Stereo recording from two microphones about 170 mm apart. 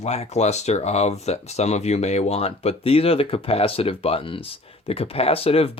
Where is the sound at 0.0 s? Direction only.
40° left (ahead or behind).